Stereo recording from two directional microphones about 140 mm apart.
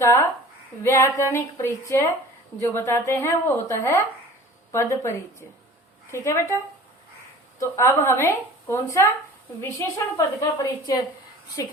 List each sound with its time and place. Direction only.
0.9 s a woman's voice: 20° left (ahead or behind)
7.6 s a woman's voice: 20° left (ahead or behind)